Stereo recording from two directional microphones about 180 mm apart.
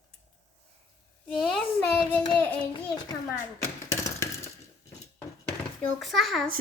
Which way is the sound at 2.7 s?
20° left (ahead or behind).